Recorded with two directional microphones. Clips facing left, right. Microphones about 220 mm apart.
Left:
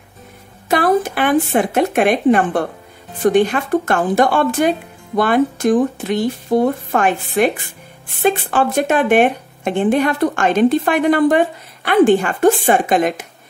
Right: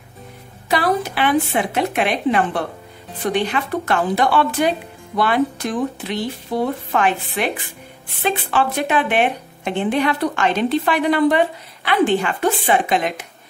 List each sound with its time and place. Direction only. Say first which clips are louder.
0.7 s speech: left 4 dB; 50° left (ahead or behind)